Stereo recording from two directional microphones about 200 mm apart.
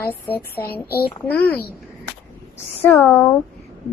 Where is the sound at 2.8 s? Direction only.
10° left (ahead or behind).